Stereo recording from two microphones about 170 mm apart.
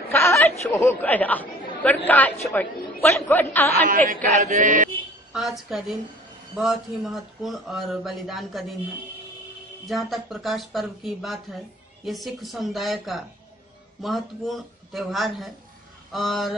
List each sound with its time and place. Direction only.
0.1 s a sound: 15° left (ahead or behind)
0.7 s speech: 15° left (ahead or behind)
4.4 s mantra: 45° right (ahead or behind)
5.3 s speech: centre (ahead or behind)
9.8 s speech: centre (ahead or behind)